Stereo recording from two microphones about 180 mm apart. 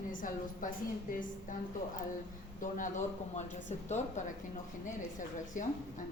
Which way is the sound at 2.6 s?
45° left (ahead or behind).